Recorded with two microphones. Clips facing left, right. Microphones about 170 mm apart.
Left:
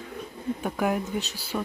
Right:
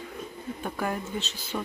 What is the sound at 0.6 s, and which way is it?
Speech, 10° left (ahead or behind).